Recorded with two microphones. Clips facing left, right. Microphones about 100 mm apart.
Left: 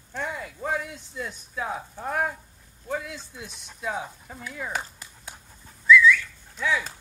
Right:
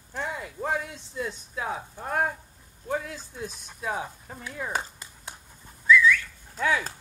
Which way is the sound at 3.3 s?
40° right (ahead or behind).